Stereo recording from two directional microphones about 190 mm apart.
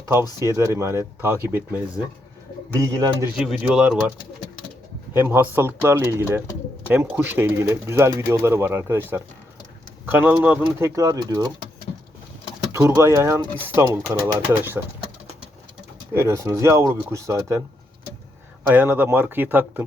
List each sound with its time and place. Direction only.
0.0 s speech: 15° right (ahead or behind)
2.7 s speech: 20° right (ahead or behind)
3.3 s speech: 5° right (ahead or behind)
5.1 s speech: 10° right (ahead or behind)
12.7 s speech: 15° right (ahead or behind)
16.1 s speech: 15° right (ahead or behind)
18.7 s speech: 10° right (ahead or behind)